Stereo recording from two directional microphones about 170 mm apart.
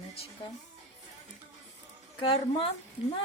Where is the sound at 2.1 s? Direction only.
30° left (ahead or behind).